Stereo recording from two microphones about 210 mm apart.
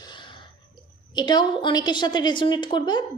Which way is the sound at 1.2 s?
20° left (ahead or behind).